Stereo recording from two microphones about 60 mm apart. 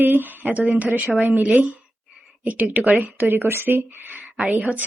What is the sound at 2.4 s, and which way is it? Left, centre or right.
A woman's voice, right.